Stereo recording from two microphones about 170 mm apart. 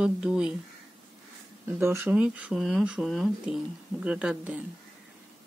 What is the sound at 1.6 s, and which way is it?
Speech, 15° right (ahead or behind).